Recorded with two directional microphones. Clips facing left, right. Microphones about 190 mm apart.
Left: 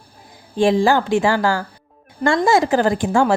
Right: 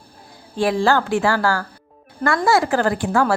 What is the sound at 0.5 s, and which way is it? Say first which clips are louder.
Speech: left 3 dB; 20° left (ahead or behind).